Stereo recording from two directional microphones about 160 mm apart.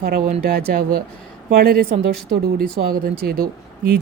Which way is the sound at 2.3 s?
70° right (ahead or behind).